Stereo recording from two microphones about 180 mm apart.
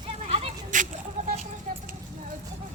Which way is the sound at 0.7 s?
45° right (ahead or behind).